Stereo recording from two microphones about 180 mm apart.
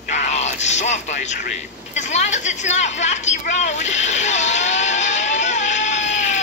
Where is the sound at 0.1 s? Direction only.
40° left (ahead or behind).